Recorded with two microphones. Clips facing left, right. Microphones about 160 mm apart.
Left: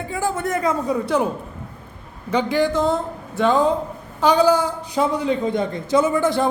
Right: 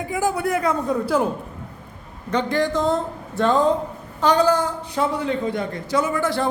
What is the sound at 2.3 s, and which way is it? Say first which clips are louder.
A man's voice: left 2 dB; 5° left (ahead or behind).